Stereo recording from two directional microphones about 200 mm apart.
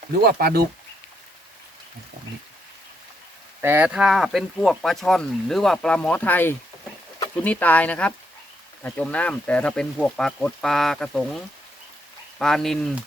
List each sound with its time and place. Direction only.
0.3 s speech: 50° right (ahead or behind)
3.6 s speech: 10° right (ahead or behind)